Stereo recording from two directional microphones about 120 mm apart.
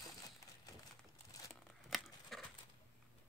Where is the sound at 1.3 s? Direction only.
30° left (ahead or behind).